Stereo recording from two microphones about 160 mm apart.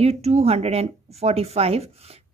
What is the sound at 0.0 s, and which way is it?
Speech, 40° right (ahead or behind).